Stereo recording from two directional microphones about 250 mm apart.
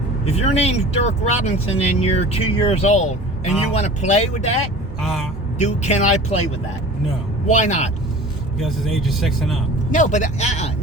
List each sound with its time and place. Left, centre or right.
0.3 s speech: left
4.9 s speech: centre
5.5 s speech: left
8.5 s speech: centre
9.9 s speech: left